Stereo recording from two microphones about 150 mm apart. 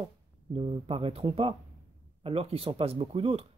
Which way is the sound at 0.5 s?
40° right (ahead or behind).